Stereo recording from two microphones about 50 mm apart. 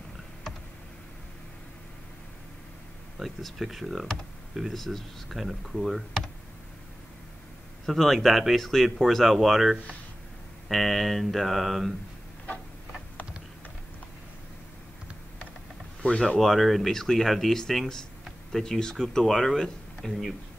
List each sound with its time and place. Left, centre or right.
3.2 s speech: centre
7.8 s speech: centre
16.0 s speech: left
16.3 s speech: centre